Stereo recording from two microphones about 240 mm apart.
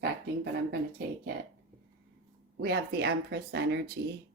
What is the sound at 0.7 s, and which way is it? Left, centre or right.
Speech, right.